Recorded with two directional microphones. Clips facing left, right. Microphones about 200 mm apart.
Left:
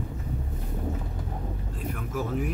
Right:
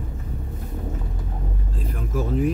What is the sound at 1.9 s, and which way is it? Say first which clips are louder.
Vehicle: right 4 dB; 30° right (ahead or behind).